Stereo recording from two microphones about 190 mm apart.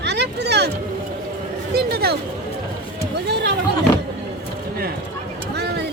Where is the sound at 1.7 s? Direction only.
55° right (ahead or behind).